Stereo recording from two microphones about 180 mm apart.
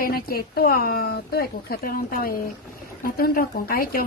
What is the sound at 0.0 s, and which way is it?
A woman's voice, 55° left (ahead or behind).